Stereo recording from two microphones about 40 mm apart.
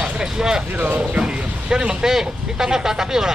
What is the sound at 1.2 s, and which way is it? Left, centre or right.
Speech, right.